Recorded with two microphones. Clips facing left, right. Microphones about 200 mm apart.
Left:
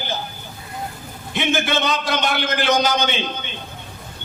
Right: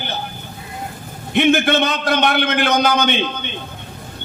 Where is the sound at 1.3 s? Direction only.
60° right (ahead or behind).